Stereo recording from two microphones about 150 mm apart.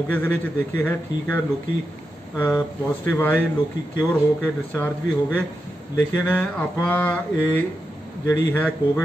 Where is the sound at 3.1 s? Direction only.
10° left (ahead or behind).